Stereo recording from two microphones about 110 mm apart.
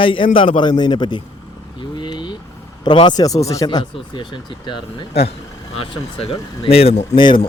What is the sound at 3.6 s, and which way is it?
Speech, 45° left (ahead or behind).